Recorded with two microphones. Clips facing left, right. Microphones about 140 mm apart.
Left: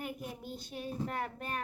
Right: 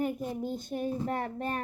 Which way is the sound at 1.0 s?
30° right (ahead or behind).